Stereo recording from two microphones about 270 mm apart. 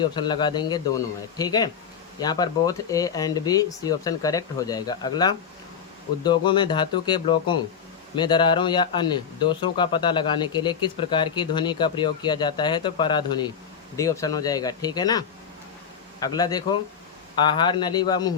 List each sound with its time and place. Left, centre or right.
0.0 s a man's voice: centre
16.2 s a man's voice: centre